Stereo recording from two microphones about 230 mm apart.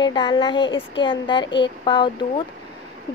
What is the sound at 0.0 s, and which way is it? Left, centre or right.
A woman's voice, centre.